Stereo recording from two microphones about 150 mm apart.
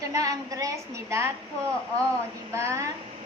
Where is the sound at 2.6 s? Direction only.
20° right (ahead or behind).